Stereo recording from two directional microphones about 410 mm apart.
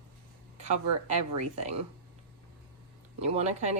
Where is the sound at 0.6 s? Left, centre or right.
Centre.